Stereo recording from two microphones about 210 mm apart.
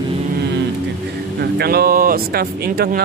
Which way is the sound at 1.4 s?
50° right (ahead or behind).